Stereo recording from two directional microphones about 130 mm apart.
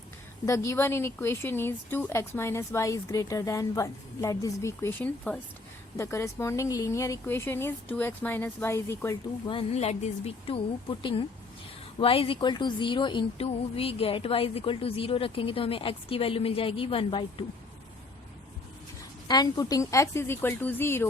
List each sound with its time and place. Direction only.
0.4 s speech: 25° left (ahead or behind)
6.0 s speech: 20° left (ahead or behind)
9.5 s a woman's voice: 50° left (ahead or behind)
19.3 s speech: 30° left (ahead or behind)